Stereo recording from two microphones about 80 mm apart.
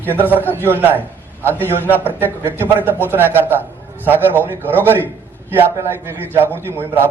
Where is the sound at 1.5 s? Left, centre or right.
Right.